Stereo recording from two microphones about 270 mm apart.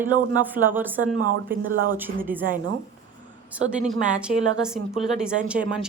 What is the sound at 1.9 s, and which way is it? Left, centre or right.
Speech, centre.